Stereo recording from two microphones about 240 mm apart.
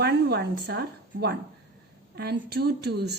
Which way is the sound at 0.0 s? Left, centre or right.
Right.